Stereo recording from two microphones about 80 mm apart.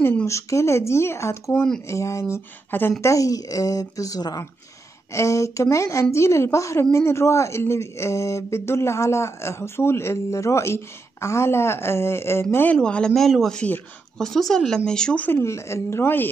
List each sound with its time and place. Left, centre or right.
0.2 s speech: left
1.5 s speech: centre
1.9 s speech: left
3.0 s speech: left
5.1 s speech: left
12.7 s speech: centre
15.2 s speech: left